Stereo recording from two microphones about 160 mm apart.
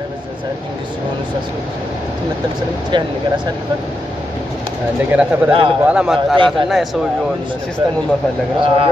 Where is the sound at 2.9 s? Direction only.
30° right (ahead or behind).